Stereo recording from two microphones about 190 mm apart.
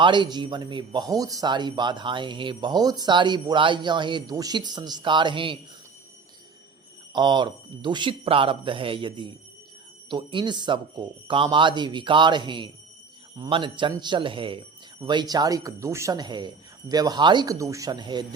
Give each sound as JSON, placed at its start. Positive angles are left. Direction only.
{"t": 0.0, "sound": "speech", "side_deg": -25}
{"t": 7.1, "sound": "speech", "side_deg": -25}